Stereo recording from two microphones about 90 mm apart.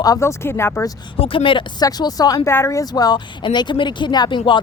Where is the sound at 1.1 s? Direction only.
85° left.